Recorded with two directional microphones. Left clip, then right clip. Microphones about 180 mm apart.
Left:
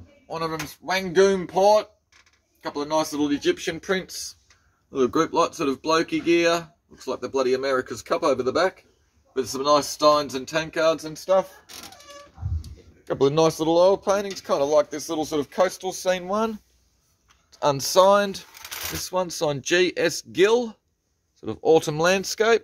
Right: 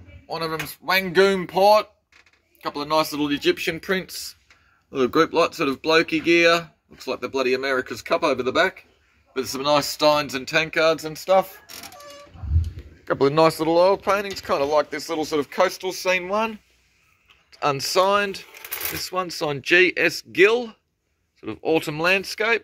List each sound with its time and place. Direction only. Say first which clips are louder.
0.3 s speech: right 1 dB; 20° left (ahead or behind)
4.9 s speech: right 2 dB; centre (ahead or behind)
13.0 s speech: right 2 dB; 15° left (ahead or behind)
13.7 s speech: right 1 dB; 30° left (ahead or behind); by 22.6 s 55° left (ahead or behind)